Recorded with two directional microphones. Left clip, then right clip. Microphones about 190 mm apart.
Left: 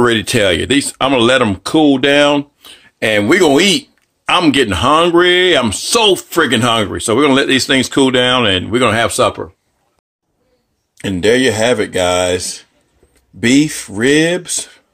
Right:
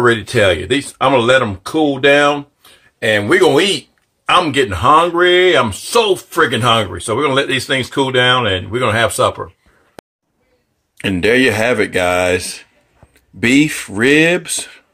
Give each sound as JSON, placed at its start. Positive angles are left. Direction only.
{"t": 0.0, "sound": "speech", "side_deg": 55}
{"t": 5.7, "sound": "speech", "side_deg": 40}
{"t": 11.0, "sound": "speech", "side_deg": 10}